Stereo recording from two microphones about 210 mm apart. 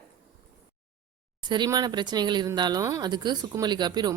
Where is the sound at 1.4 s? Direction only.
20° right (ahead or behind).